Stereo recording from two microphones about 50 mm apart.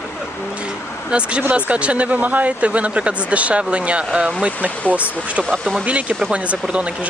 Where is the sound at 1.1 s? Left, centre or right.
Right.